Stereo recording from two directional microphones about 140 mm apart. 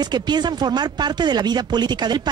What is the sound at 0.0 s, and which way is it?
Speech, 30° right (ahead or behind).